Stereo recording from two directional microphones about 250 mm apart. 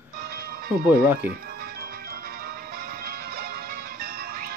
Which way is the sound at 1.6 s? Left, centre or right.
Right.